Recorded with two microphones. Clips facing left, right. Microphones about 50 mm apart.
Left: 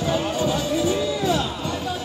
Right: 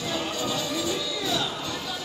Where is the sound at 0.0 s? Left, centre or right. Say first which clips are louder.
Left 7 dB; left.